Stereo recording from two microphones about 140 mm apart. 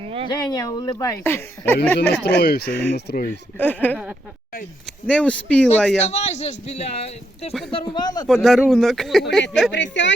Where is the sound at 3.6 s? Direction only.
10° left (ahead or behind).